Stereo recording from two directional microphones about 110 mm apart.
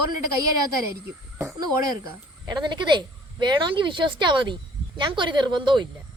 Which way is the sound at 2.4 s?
40° right (ahead or behind).